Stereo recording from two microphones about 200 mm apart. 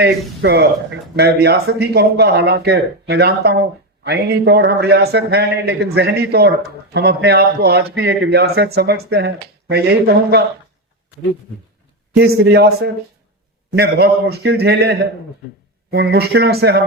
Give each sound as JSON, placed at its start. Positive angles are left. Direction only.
{"t": 0.0, "sound": "speech", "side_deg": -55}
{"t": 12.1, "sound": "speech", "side_deg": -55}